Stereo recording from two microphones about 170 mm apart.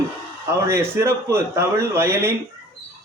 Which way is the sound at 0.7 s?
15° right (ahead or behind).